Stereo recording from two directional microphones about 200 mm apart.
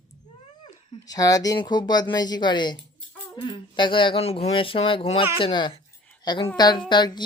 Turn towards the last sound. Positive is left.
turn(degrees=20)  # may be behind; listen again after turning